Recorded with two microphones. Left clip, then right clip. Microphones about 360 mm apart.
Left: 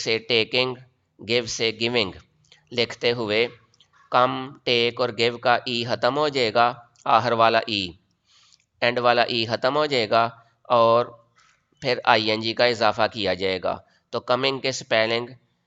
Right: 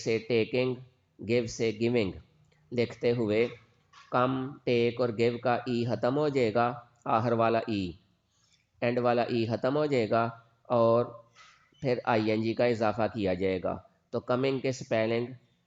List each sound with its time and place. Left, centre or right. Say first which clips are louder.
0.0 s speech: left 6 dB; left